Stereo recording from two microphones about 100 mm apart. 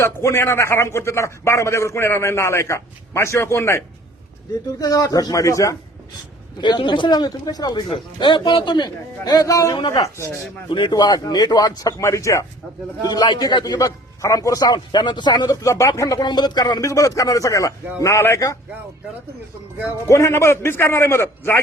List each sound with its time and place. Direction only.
0.0 s a man's voice: 25° left (ahead or behind)
4.8 s a man's voice: 40° left (ahead or behind)
6.6 s a man's voice: 50° left (ahead or behind)
7.9 s a man's voice: 55° left (ahead or behind); by 10.3 s 30° left (ahead or behind)
10.7 s a man's voice: 50° left (ahead or behind); by 12.5 s 30° left (ahead or behind)
13.1 s a man's voice: 45° left (ahead or behind); by 18.5 s 30° left (ahead or behind)
20.1 s a man's voice: 30° left (ahead or behind)